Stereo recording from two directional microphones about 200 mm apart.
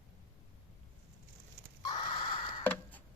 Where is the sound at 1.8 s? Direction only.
20° left (ahead or behind).